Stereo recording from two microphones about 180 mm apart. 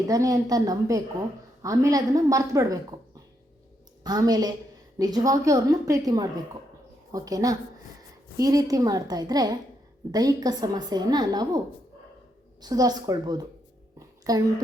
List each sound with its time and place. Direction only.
0.1 s a woman's voice: 20° right (ahead or behind)
4.0 s a woman's voice: 20° right (ahead or behind)
12.6 s a woman's voice: 20° right (ahead or behind)